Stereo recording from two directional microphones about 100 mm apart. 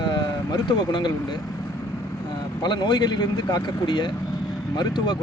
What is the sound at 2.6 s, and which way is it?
Speech, 45° left (ahead or behind).